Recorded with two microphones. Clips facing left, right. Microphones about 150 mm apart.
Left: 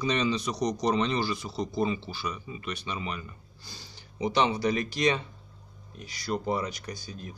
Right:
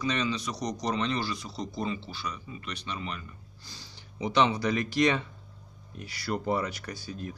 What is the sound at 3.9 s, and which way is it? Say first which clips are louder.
A man's voice: right 1 dB; 35° left (ahead or behind).